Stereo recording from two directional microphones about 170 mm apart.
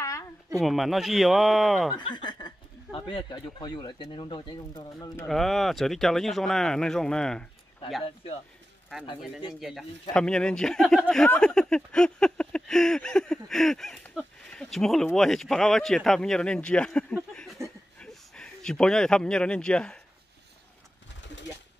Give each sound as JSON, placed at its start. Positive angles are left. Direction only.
{"t": 0.6, "sound": "speech", "side_deg": 0}
{"t": 2.0, "sound": "speech", "side_deg": 25}
{"t": 5.2, "sound": "speech", "side_deg": 0}
{"t": 9.5, "sound": "speech", "side_deg": 0}